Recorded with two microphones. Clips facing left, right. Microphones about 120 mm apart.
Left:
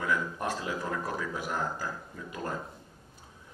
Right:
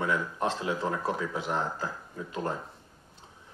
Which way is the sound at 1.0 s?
25° right (ahead or behind).